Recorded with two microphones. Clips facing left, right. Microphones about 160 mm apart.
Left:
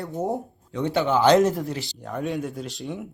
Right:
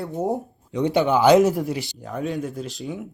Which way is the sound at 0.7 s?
15° right (ahead or behind).